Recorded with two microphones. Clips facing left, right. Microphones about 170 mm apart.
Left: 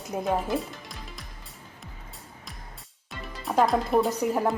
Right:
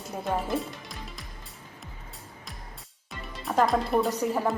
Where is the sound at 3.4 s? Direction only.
Centre (ahead or behind).